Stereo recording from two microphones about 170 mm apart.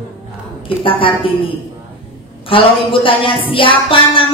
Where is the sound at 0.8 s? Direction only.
30° left (ahead or behind).